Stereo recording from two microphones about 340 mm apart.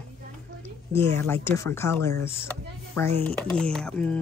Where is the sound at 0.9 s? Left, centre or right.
Centre.